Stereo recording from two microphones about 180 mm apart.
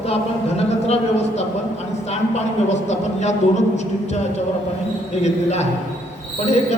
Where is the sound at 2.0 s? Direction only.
40° left (ahead or behind).